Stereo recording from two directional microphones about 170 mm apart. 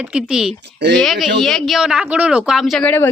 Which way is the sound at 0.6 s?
90° right.